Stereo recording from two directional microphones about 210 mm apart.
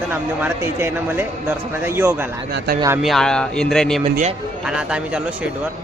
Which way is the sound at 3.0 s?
Centre (ahead or behind).